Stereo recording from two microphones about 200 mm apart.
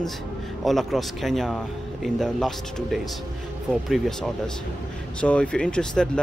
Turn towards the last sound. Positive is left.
turn(degrees=5)  # may be behind; listen again after turning